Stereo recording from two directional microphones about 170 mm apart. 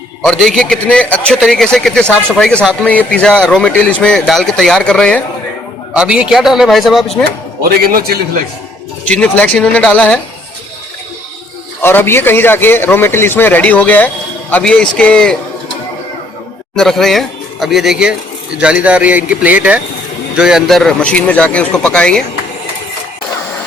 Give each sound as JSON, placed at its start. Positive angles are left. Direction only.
{"t": 0.2, "sound": "speech", "side_deg": 5}
{"t": 5.9, "sound": "speech", "side_deg": -5}
{"t": 7.8, "sound": "a man's voice", "side_deg": -60}
{"t": 9.0, "sound": "a man's voice", "side_deg": 10}
{"t": 11.8, "sound": "a man's voice", "side_deg": 15}
{"t": 16.7, "sound": "a man's voice", "side_deg": 0}